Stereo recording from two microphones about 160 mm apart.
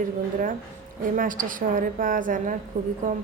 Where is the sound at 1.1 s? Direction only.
55° right (ahead or behind).